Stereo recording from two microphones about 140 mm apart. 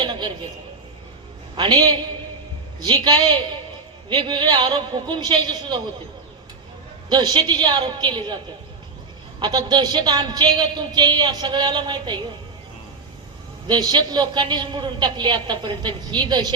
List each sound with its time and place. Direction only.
0.0 s a sound: 35° right (ahead or behind)
1.5 s a woman's voice: 30° right (ahead or behind)
7.1 s a woman's voice: 30° right (ahead or behind)
9.4 s a woman's voice: 30° right (ahead or behind)
13.7 s a woman's voice: 30° right (ahead or behind)